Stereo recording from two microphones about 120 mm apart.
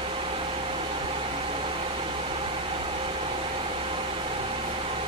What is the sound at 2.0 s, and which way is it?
Vehicle, 50° right (ahead or behind).